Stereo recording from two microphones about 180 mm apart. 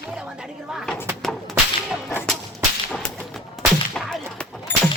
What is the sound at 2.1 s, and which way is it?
Speech, 10° left (ahead or behind).